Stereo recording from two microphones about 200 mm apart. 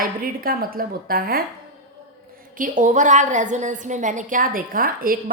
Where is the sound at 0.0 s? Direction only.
45° right (ahead or behind).